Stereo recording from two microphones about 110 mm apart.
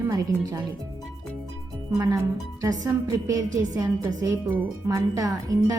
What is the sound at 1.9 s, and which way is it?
A woman's voice, 25° right (ahead or behind).